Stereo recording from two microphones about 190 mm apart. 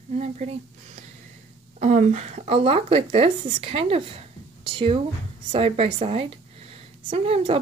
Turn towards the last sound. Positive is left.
turn(degrees=-30)  # may be behind; listen again after turning